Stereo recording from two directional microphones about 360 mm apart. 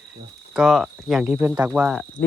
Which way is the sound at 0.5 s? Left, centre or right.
Centre.